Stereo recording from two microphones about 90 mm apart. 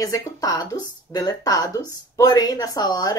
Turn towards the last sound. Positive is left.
turn(degrees=45)  # may be behind; listen again after turning